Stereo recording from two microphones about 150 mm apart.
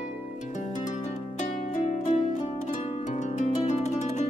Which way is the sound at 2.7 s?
55° left (ahead or behind).